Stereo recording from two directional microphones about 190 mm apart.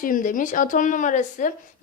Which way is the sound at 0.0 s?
45° left (ahead or behind).